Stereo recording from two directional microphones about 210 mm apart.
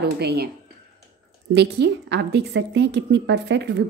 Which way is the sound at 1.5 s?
55° right (ahead or behind).